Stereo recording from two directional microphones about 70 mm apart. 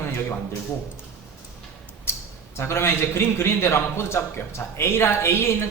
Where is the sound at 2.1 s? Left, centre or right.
Left.